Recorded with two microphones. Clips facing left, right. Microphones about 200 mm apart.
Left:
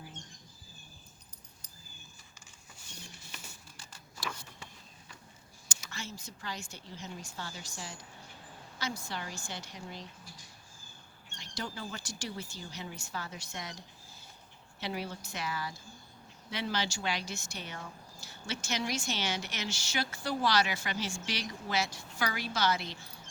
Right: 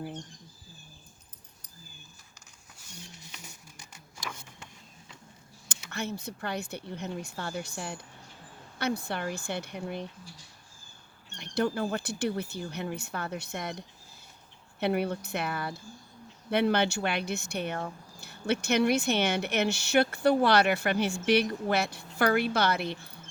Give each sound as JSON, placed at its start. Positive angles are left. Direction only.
{"t": 3.2, "sound": "a sound", "side_deg": -15}
{"t": 5.6, "sound": "speech", "side_deg": -60}
{"t": 11.3, "sound": "speech", "side_deg": -60}